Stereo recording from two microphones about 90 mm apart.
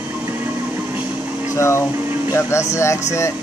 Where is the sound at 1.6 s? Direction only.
30° left (ahead or behind).